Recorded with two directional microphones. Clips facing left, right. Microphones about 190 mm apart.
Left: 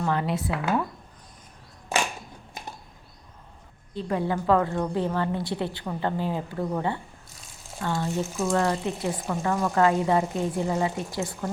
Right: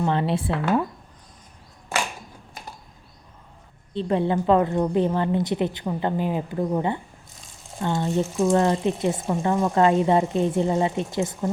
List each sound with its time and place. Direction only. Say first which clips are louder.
0.0 s a woman's voice: right 3 dB; 25° right (ahead or behind)
3.9 s a woman's voice: right 5 dB; 25° right (ahead or behind)